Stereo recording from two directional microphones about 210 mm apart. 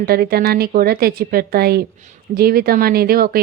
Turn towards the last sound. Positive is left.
turn(degrees=-45)  # may be behind; listen again after turning